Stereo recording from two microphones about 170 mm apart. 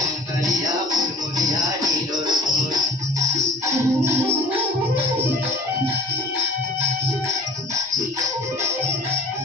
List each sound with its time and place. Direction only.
1.4 s music: 20° right (ahead or behind)